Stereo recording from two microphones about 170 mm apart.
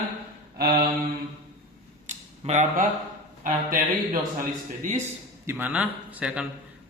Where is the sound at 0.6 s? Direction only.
65° right (ahead or behind).